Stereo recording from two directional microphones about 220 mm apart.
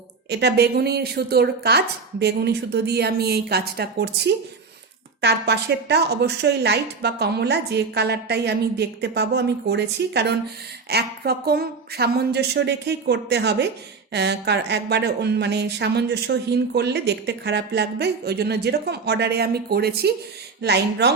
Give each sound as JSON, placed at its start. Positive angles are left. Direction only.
{"t": 0.3, "sound": "a woman's voice", "side_deg": -50}